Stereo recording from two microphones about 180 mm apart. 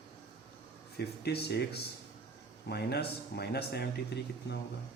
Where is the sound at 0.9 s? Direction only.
65° left (ahead or behind).